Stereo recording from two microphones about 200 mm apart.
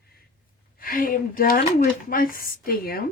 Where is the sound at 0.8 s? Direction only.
45° left (ahead or behind).